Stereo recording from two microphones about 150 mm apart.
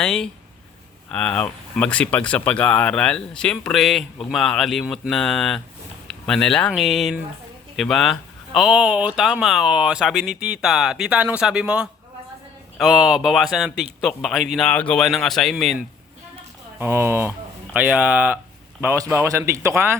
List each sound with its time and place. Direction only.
0.0 s speech: 5° left (ahead or behind)
16.7 s a man's voice: 15° right (ahead or behind)